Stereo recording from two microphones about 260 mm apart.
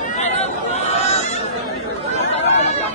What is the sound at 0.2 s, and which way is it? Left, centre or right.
Chatter, left.